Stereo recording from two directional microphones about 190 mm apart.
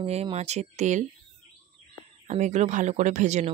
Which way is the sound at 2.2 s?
40° right (ahead or behind).